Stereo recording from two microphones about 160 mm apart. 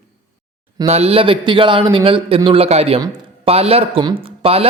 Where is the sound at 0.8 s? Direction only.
40° right (ahead or behind).